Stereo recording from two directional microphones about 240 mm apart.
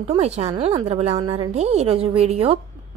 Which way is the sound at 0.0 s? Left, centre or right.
Right.